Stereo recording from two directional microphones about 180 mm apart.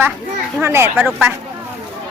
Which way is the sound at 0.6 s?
15° right (ahead or behind).